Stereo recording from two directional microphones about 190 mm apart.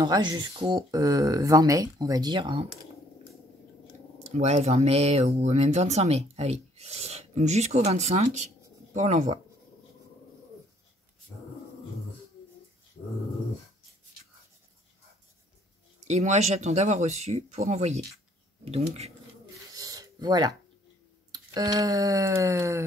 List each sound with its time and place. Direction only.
0.0 s speech: 20° right (ahead or behind)
4.3 s speech: 35° right (ahead or behind)
16.0 s speech: 35° right (ahead or behind)
19.7 s a sound: 20° right (ahead or behind)